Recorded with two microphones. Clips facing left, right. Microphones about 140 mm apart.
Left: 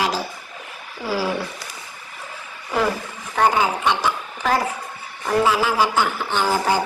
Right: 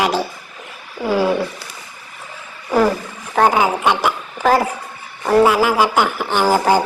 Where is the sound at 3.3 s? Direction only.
55° right (ahead or behind).